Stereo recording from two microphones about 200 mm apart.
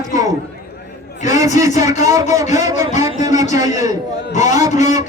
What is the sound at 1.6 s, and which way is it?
A man's voice, 15° right (ahead or behind).